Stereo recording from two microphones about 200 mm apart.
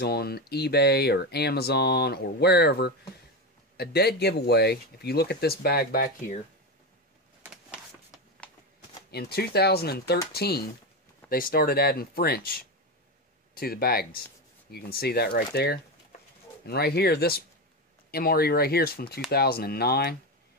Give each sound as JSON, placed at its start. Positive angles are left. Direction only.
{"t": 0.0, "sound": "a man's voice", "side_deg": 50}
{"t": 9.1, "sound": "speech", "side_deg": 55}